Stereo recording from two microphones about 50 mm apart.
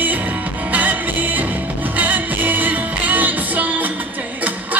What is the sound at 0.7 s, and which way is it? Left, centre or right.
Music, right.